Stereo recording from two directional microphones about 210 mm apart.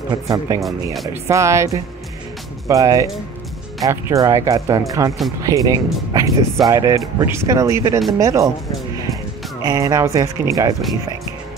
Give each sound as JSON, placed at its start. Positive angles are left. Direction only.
{"t": 0.1, "sound": "speech", "side_deg": -15}
{"t": 9.6, "sound": "speech", "side_deg": -15}